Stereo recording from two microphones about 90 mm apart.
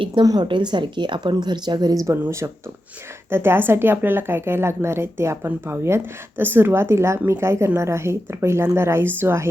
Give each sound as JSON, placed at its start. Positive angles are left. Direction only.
{"t": 0.3, "sound": "a woman's voice", "side_deg": -55}